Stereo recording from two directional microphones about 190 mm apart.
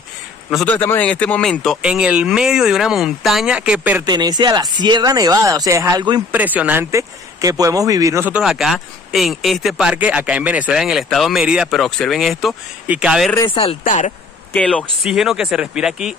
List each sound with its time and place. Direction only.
0.7 s speech: 10° left (ahead or behind); by 4.0 s 5° right (ahead or behind)
4.0 s speech: 20° right (ahead or behind)
6.3 s speech: 10° right (ahead or behind)
13.4 s speech: 30° left (ahead or behind)
14.5 s speech: 5° left (ahead or behind)